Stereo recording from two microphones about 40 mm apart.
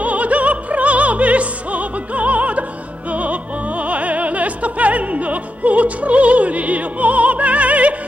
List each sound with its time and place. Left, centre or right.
0.0 s opera: right
3.1 s music: right